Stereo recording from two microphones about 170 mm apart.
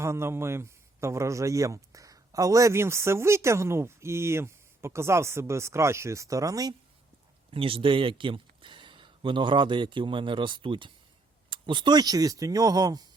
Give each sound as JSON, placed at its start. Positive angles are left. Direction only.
{"t": 0.0, "sound": "a man's voice", "side_deg": -15}
{"t": 7.5, "sound": "speech", "side_deg": -30}